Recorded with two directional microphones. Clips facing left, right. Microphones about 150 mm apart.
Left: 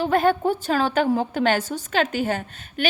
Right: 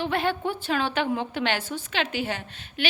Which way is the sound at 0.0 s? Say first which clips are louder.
Left 6 dB; 45° left (ahead or behind).